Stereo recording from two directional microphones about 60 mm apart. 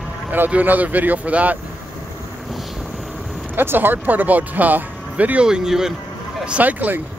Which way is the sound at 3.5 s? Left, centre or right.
Right.